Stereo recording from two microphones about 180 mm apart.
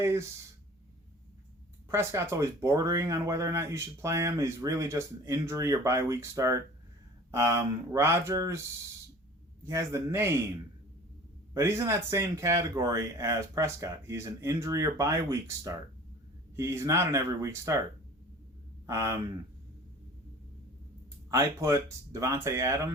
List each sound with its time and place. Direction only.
0.0 s speech: 15° right (ahead or behind)
1.9 s speech: 15° right (ahead or behind)
9.6 s speech: 15° right (ahead or behind)
11.5 s speech: 15° right (ahead or behind)
18.9 s speech: 15° right (ahead or behind)
21.2 s speech: 15° right (ahead or behind)